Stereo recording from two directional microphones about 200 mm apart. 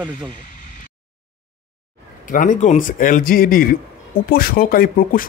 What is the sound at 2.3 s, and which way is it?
Speech, 40° left (ahead or behind).